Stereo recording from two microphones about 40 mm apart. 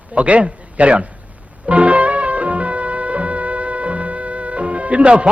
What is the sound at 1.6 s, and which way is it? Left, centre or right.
Music, right.